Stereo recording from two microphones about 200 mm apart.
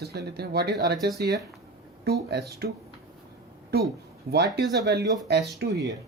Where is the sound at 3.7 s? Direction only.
55° right (ahead or behind).